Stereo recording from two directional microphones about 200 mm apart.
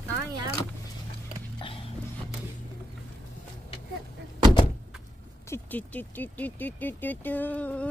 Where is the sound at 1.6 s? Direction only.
25° left (ahead or behind).